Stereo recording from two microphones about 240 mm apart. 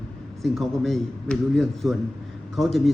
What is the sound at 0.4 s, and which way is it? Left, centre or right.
A man's voice, centre.